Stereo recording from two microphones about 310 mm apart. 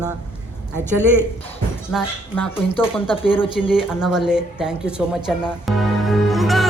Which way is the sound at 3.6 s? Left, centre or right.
Centre.